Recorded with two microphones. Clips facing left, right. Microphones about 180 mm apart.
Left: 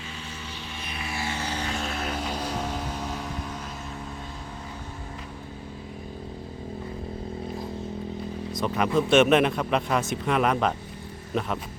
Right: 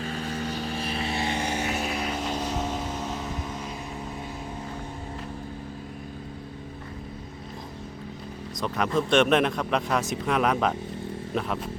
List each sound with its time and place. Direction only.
0.3 s vehicle: 40° right (ahead or behind); by 1.9 s 15° right (ahead or behind)
1.9 s vehicle: centre (ahead or behind)
8.5 s a man's voice: centre (ahead or behind)